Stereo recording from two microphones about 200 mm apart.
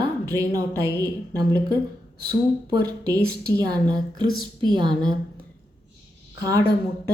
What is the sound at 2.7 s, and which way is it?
Speech, 20° right (ahead or behind).